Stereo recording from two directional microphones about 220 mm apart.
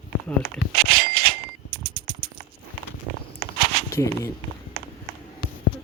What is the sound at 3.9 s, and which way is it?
Speech, 15° left (ahead or behind).